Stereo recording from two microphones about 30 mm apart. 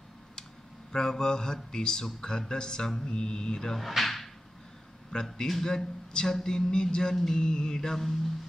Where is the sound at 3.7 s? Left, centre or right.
Centre.